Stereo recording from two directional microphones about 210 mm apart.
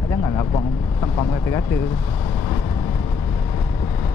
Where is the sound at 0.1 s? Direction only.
15° left (ahead or behind).